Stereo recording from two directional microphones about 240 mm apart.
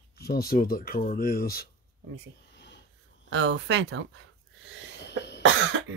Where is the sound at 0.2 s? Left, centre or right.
Left.